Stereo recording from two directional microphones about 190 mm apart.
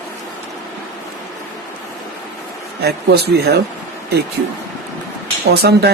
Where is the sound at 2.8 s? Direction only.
55° right (ahead or behind).